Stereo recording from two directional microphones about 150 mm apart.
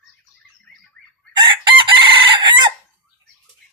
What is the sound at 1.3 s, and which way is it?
Chicken, 30° right (ahead or behind).